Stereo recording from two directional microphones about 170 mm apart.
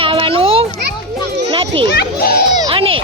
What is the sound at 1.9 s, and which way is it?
Speech, 65° left (ahead or behind).